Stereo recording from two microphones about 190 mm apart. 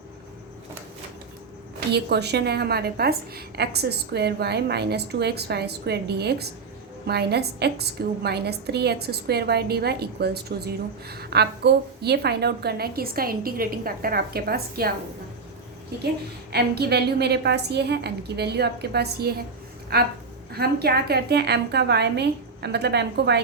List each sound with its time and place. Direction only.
1.9 s a woman's voice: 60° right (ahead or behind)
16.5 s a woman's voice: 55° right (ahead or behind)